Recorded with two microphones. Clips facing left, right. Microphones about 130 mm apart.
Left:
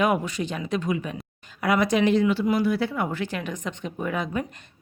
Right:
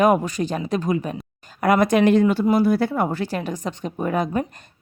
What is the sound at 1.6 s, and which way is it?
Speech, 50° right (ahead or behind).